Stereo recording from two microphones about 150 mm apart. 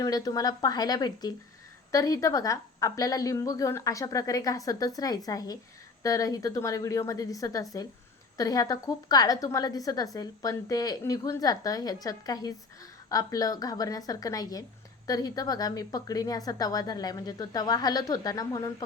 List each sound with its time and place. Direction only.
0.0 s a woman's voice: 25° left (ahead or behind)